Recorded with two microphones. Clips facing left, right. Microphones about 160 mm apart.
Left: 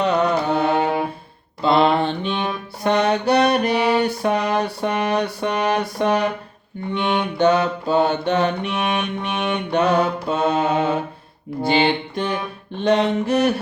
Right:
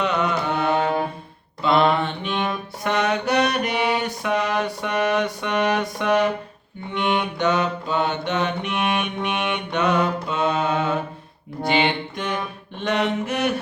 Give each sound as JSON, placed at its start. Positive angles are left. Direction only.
{"t": 0.0, "sound": "music", "side_deg": 35}
{"t": 1.6, "sound": "mantra", "side_deg": 30}
{"t": 2.3, "sound": "music", "side_deg": 5}
{"t": 2.8, "sound": "music", "side_deg": 30}
{"t": 4.0, "sound": "mantra", "side_deg": 35}
{"t": 6.9, "sound": "music", "side_deg": 0}
{"t": 7.3, "sound": "music", "side_deg": 35}
{"t": 8.7, "sound": "music", "side_deg": 0}
{"t": 9.7, "sound": "mantra", "side_deg": 35}
{"t": 11.7, "sound": "music", "side_deg": 35}